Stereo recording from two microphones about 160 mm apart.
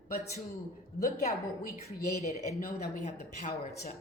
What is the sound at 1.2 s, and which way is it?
Speech, 45° left (ahead or behind).